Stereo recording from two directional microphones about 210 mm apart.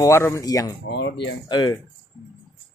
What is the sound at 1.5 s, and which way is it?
Speech, 20° left (ahead or behind).